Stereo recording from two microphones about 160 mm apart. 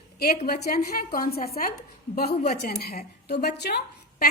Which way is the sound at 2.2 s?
80° left.